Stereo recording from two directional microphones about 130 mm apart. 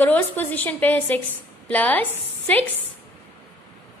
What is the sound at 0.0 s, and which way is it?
A woman's voice, 15° left (ahead or behind).